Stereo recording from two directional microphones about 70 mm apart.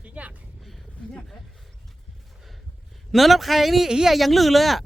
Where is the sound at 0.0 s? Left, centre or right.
Centre.